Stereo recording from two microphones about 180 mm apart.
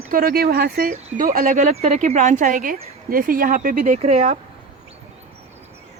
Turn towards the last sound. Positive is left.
turn(degrees=-40)  # may be behind; listen again after turning